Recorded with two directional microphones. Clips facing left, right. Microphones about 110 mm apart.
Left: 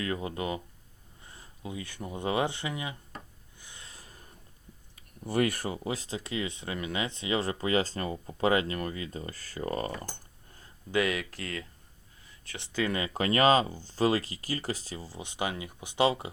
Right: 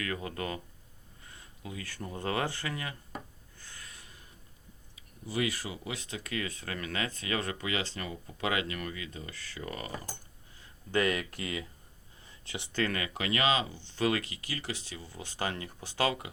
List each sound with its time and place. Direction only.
0.0 s speech: 25° left (ahead or behind)
1.2 s speech: 30° left (ahead or behind)
3.6 s a sound: 15° left (ahead or behind)
3.8 s a sound: 35° left (ahead or behind)
4.9 s speech: 50° left (ahead or behind)
10.9 s speech: centre (ahead or behind)
12.7 s speech: 5° left (ahead or behind)
13.1 s speech: 40° left (ahead or behind)
15.2 s speech: 15° left (ahead or behind)